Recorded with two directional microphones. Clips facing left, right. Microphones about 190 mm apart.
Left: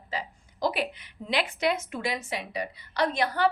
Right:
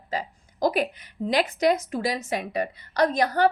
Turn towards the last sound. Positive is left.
turn(degrees=-40)  # may be behind; listen again after turning